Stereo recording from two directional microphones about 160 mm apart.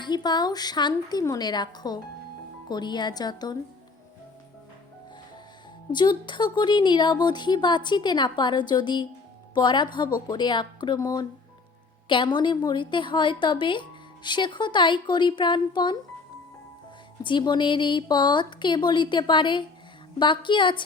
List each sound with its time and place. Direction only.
0.0 s speech: 25° left (ahead or behind)
5.9 s speech: 30° left (ahead or behind)
17.2 s a woman's voice: 30° left (ahead or behind)